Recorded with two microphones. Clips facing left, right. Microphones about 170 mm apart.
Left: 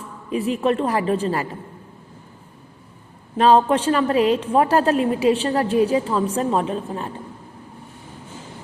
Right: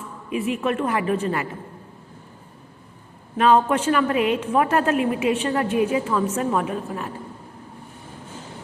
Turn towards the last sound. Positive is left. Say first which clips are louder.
# left 2 dB
turn(degrees=30)  # may be behind; listen again after turning